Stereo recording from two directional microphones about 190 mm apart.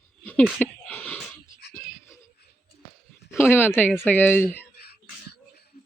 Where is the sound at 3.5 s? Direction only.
10° left (ahead or behind).